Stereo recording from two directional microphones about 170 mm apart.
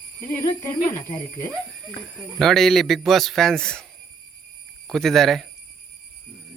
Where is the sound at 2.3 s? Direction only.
Centre (ahead or behind).